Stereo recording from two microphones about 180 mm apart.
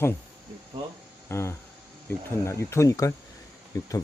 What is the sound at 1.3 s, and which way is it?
Speech, 15° left (ahead or behind).